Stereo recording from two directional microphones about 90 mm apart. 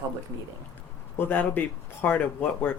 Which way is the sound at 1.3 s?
20° left (ahead or behind).